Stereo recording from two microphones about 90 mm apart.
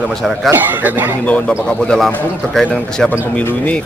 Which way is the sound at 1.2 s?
15° left (ahead or behind).